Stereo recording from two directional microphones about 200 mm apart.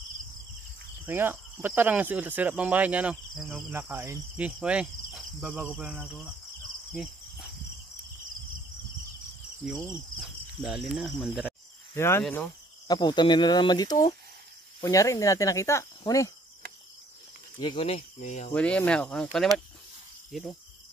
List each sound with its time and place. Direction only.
1.0 s speech: 10° right (ahead or behind)
6.9 s cricket: centre (ahead or behind)
9.7 s speech: centre (ahead or behind)
11.9 s speech: 10° left (ahead or behind)
12.8 s speech: 20° left (ahead or behind)
17.6 s speech: 25° left (ahead or behind)
18.5 s speech: 5° left (ahead or behind)
20.2 s cricket: centre (ahead or behind)